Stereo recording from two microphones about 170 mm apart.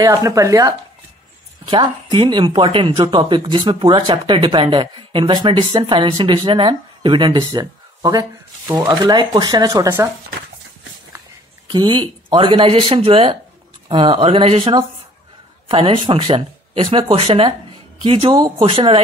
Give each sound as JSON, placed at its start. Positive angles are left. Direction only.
{"t": 0.0, "sound": "speech", "side_deg": -20}
{"t": 11.7, "sound": "speech", "side_deg": -25}